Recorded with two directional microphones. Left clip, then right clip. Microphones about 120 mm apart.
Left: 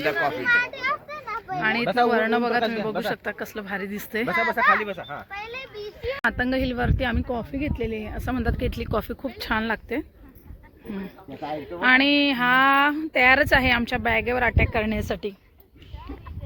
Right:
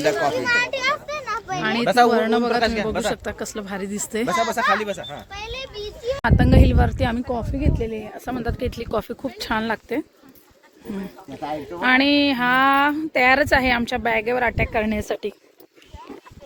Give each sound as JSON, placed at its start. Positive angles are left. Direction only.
{"t": 0.0, "sound": "a child's voice", "side_deg": -50}
{"t": 1.3, "sound": "children playing", "side_deg": -15}
{"t": 1.6, "sound": "speech", "side_deg": -35}
{"t": 2.7, "sound": "speech", "side_deg": 20}
{"t": 3.1, "sound": "speech", "side_deg": -25}
{"t": 4.3, "sound": "a child's voice", "side_deg": 35}
{"t": 6.2, "sound": "speech", "side_deg": -20}
{"t": 7.2, "sound": "speech", "side_deg": 0}
{"t": 11.8, "sound": "speech", "side_deg": -20}